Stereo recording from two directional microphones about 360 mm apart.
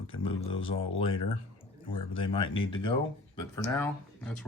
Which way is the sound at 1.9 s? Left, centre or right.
Centre.